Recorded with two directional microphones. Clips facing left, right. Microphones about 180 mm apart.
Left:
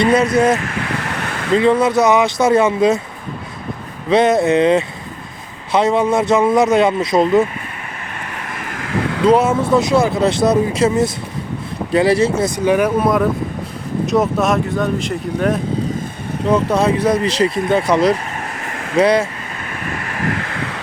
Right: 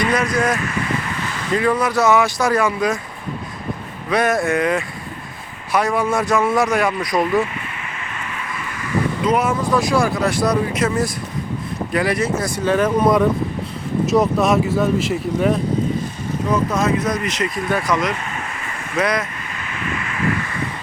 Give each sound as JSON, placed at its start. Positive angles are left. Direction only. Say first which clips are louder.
{"t": 0.0, "sound": "speech", "louder": "left 6 dB", "side_deg": 25}
{"t": 1.0, "sound": "a sound", "louder": "left 3 dB", "side_deg": 70}
{"t": 1.5, "sound": "speech", "louder": "left 5 dB", "side_deg": 25}
{"t": 4.1, "sound": "speech", "louder": "left 5 dB", "side_deg": 20}
{"t": 8.9, "sound": "a sound", "louder": "left 1 dB", "side_deg": 80}
{"t": 9.2, "sound": "speech", "louder": "left 8 dB", "side_deg": 25}
{"t": 14.1, "sound": "speech", "louder": "even", "side_deg": 0}
{"t": 16.5, "sound": "speech", "louder": "left 4 dB", "side_deg": 30}
{"t": 20.5, "sound": "a sound", "louder": "left 1 dB", "side_deg": 85}